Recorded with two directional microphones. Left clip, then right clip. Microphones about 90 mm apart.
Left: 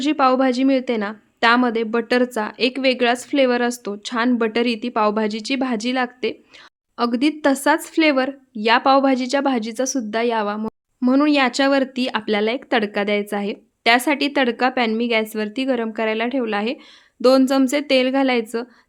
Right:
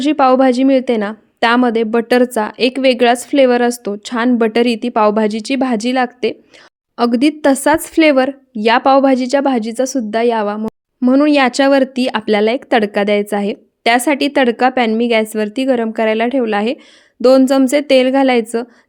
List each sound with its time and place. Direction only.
0.0 s speech: 35° right (ahead or behind); by 11.3 s 20° right (ahead or behind)
11.3 s speech: 35° right (ahead or behind)